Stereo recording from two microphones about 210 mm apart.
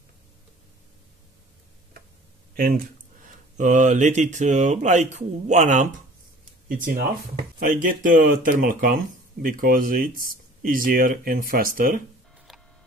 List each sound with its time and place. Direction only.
2.5 s speech: 45° right (ahead or behind)